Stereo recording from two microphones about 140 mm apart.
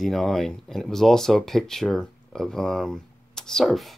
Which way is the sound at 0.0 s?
Centre (ahead or behind).